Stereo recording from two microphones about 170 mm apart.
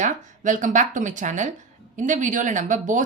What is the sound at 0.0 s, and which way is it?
Speech, 50° right (ahead or behind).